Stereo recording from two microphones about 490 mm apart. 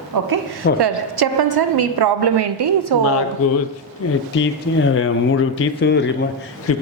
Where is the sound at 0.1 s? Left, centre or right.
Right.